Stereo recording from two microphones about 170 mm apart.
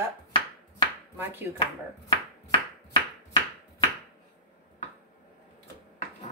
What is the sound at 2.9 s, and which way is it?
Chopping, 30° left (ahead or behind).